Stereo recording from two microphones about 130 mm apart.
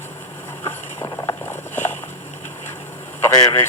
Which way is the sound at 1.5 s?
15° left (ahead or behind).